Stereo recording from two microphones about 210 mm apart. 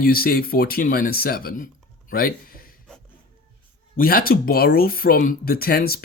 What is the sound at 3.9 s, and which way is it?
Speech, 45° left (ahead or behind).